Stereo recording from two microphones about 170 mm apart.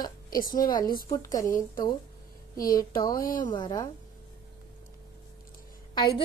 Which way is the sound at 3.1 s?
55° left (ahead or behind).